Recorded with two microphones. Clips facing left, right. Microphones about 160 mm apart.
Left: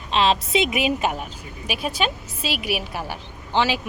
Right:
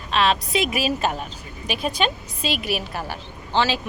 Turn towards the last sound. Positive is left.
turn(degrees=15)  # may be behind; listen again after turning